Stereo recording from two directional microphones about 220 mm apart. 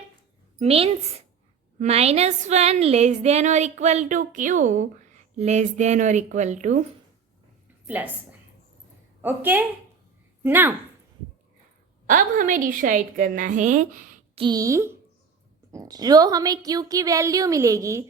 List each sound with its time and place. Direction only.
0.6 s a woman's voice: 25° right (ahead or behind)
7.9 s a woman's voice: 10° right (ahead or behind)
9.2 s a woman's voice: 10° right (ahead or behind)
12.0 s a woman's voice: 35° right (ahead or behind)
14.4 s a woman's voice: 15° right (ahead or behind)